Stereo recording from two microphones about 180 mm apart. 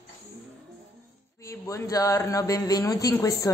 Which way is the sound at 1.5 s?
15° left (ahead or behind).